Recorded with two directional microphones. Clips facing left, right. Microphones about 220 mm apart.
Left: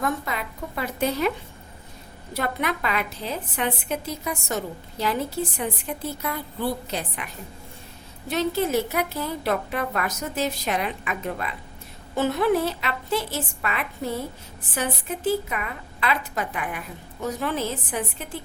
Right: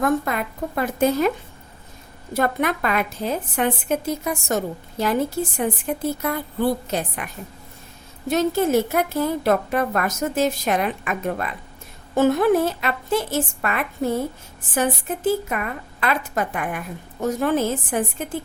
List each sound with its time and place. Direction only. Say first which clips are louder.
0.0 s a woman's voice: right 6 dB; 50° right (ahead or behind)
2.3 s a woman's voice: right 5 dB; 50° right (ahead or behind)
8.3 s a woman's voice: right 5 dB; 45° right (ahead or behind)